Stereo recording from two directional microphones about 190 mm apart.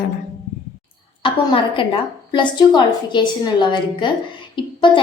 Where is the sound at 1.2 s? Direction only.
25° left (ahead or behind).